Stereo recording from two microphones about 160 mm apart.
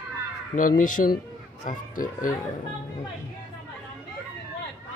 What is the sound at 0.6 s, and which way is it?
Speech, 55° left (ahead or behind).